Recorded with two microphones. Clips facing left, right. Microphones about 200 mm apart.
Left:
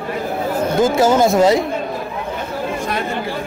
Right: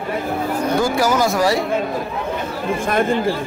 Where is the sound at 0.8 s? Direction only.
25° left (ahead or behind).